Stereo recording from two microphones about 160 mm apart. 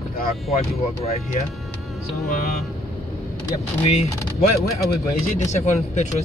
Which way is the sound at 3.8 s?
40° left (ahead or behind).